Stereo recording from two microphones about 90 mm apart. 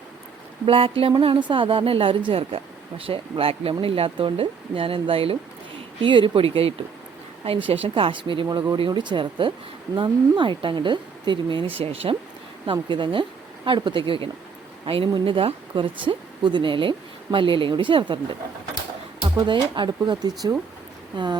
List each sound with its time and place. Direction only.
0.6 s speech: 90° right
1.2 s a woman's voice: 70° right (ahead or behind); by 5.4 s 90° right
6.0 s a woman's voice: 75° right (ahead or behind); by 12.1 s 90° right
12.6 s a woman's voice: 60° right (ahead or behind)
14.8 s speech: 90° right
15.2 s speech: 80° right
19.5 s a woman's voice: 60° right (ahead or behind)